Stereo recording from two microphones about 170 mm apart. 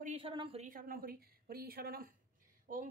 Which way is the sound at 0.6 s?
55° right (ahead or behind).